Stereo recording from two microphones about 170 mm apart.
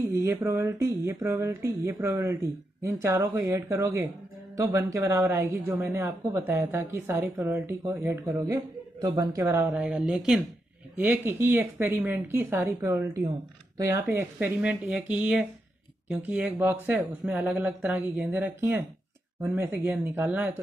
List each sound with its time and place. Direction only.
0.0 s speech: 15° right (ahead or behind)